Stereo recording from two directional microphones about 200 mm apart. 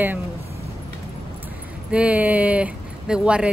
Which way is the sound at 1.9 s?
5° right (ahead or behind).